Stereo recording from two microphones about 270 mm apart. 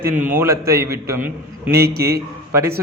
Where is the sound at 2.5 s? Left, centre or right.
Centre.